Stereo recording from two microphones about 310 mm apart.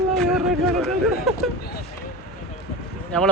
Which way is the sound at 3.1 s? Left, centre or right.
Centre.